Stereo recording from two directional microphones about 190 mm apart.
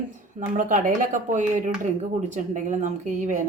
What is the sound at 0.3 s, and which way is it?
A woman's voice, 45° right (ahead or behind).